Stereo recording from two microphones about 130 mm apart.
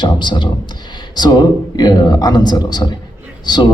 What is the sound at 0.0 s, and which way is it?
Speech, 35° left (ahead or behind).